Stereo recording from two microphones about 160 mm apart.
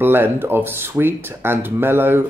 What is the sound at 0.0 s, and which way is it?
Speech, 15° right (ahead or behind).